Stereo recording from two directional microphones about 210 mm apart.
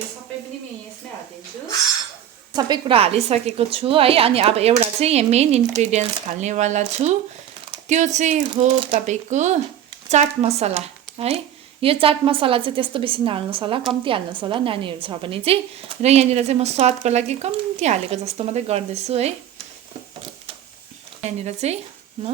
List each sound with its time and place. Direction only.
2.5 s a woman's voice: 20° right (ahead or behind)
21.2 s speech: 30° right (ahead or behind)